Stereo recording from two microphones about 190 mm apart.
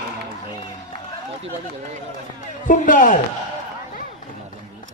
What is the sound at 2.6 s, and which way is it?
Speech, 45° left (ahead or behind).